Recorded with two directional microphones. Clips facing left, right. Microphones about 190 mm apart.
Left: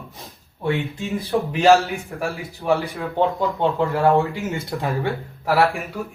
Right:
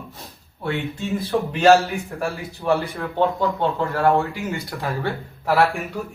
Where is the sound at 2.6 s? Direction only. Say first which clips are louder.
Even; 10° left (ahead or behind).